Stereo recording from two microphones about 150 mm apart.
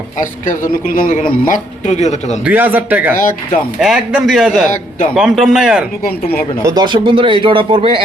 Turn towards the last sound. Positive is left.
turn(degrees=-35)  # may be behind; listen again after turning